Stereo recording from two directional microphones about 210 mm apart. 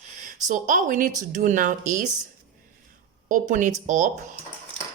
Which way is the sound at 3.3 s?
40° right (ahead or behind).